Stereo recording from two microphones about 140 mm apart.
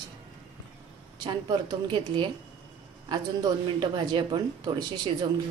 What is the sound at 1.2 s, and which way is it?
Speech, 35° right (ahead or behind).